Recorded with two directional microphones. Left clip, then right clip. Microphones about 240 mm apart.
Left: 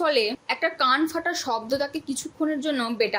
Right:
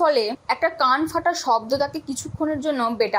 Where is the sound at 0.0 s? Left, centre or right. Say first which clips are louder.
Right 3 dB; centre.